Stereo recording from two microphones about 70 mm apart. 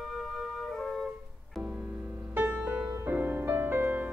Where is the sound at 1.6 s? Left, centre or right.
Centre.